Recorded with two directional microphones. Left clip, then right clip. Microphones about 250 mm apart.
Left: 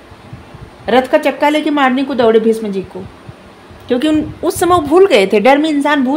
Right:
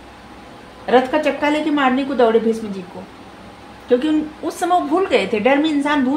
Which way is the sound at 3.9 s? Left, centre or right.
Left.